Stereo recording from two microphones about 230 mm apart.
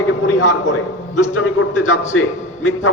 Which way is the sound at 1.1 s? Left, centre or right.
Left.